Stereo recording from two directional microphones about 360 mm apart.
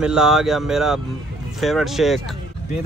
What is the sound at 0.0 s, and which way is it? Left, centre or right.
Speech, centre.